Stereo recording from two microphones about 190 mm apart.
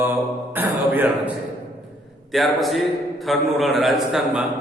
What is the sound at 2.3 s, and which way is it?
A man's voice, centre (ahead or behind).